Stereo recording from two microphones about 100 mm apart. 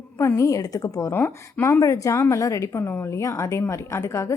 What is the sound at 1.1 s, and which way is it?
A woman's voice, 20° left (ahead or behind).